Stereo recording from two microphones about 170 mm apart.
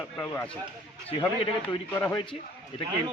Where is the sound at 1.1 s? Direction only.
35° left (ahead or behind).